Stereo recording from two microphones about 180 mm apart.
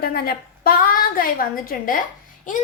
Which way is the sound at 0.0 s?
55° left (ahead or behind).